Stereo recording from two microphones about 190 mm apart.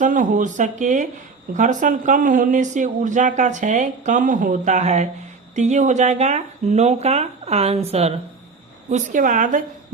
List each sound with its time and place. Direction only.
0.0 s a woman's voice: 45° right (ahead or behind)